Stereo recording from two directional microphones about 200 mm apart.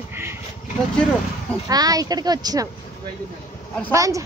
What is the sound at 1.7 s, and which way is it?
Speech, 20° right (ahead or behind).